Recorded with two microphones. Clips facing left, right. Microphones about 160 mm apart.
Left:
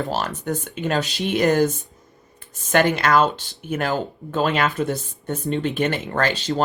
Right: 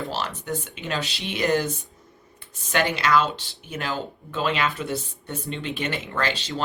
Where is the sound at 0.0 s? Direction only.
45° left (ahead or behind).